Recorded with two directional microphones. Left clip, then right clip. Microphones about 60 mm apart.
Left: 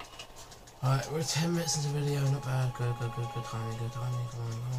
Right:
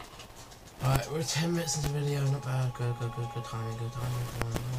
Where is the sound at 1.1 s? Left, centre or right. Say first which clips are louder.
Right 1 dB; centre.